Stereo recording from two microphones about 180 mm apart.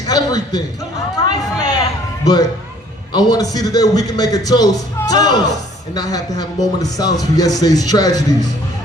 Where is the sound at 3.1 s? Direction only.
20° left (ahead or behind).